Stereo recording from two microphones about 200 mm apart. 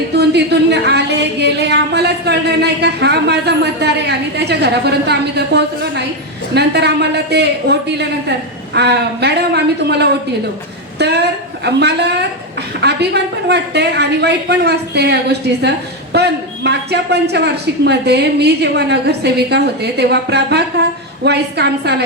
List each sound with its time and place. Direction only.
0.1 s a woman's voice: 55° right (ahead or behind)